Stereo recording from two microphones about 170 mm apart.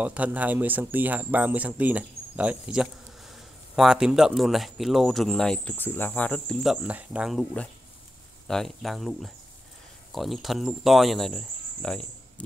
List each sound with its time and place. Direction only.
0.0 s speech: 10° right (ahead or behind)